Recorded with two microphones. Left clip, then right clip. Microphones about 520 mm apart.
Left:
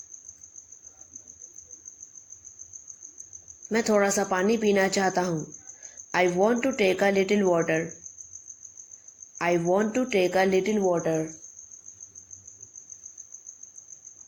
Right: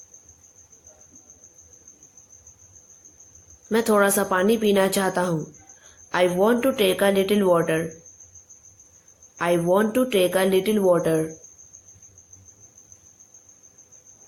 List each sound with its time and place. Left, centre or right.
3.7 s speech: right
9.4 s speech: right